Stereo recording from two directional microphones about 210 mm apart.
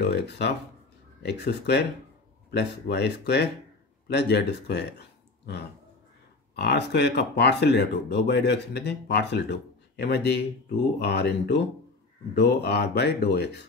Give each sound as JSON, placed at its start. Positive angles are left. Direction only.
{"t": 0.0, "sound": "speech", "side_deg": 55}
{"t": 6.5, "sound": "speech", "side_deg": 55}